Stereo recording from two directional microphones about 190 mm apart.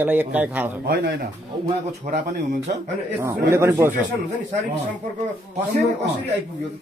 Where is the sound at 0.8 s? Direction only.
60° right (ahead or behind).